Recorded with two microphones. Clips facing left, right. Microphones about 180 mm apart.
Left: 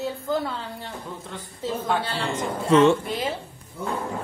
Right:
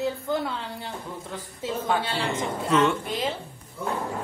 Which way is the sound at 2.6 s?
25° left (ahead or behind).